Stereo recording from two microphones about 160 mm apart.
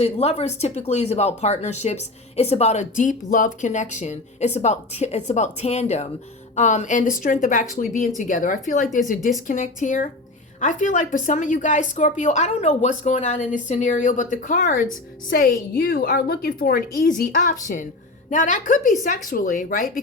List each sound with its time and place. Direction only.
0.0 s a woman's voice: 40° left (ahead or behind)
15.3 s a woman's voice: 65° left (ahead or behind)